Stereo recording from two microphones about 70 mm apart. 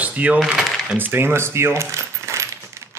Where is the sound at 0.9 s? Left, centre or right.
Right.